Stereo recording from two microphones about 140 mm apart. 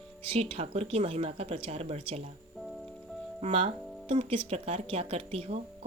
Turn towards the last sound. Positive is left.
turn(degrees=-45)  # may be behind; listen again after turning